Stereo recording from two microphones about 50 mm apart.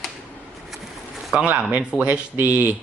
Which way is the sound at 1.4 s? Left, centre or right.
Right.